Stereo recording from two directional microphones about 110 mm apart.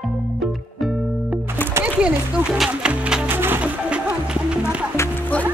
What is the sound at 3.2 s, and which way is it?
Music, 20° right (ahead or behind).